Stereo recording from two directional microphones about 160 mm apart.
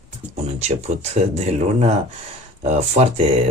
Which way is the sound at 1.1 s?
45° right (ahead or behind).